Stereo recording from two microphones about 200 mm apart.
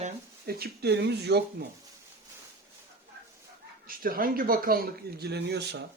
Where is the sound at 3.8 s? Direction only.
45° right (ahead or behind).